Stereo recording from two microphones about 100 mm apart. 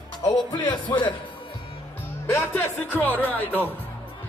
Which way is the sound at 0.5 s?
50° left (ahead or behind).